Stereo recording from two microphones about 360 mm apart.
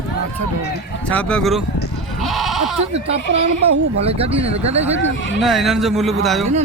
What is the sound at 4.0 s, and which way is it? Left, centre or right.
Speech, centre.